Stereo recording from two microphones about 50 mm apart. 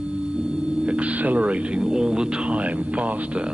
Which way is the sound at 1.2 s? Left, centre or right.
Right.